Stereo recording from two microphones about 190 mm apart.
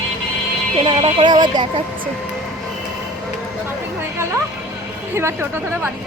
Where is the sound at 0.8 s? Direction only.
30° right (ahead or behind).